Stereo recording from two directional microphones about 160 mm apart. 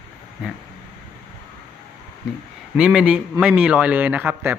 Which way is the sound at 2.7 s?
5° right (ahead or behind).